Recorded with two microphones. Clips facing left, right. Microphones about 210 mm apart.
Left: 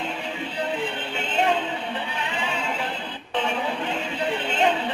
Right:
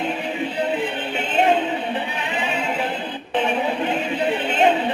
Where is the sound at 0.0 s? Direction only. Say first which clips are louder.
Right 6 dB; 20° right (ahead or behind).